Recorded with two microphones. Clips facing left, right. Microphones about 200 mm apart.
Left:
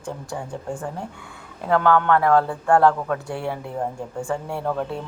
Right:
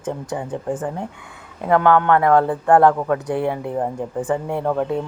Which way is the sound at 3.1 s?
55° right (ahead or behind).